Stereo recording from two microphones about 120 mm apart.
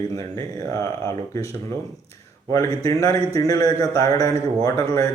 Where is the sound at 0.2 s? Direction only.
25° left (ahead or behind).